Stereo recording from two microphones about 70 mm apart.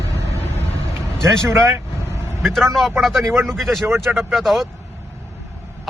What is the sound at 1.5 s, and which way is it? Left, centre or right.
Vehicle, right.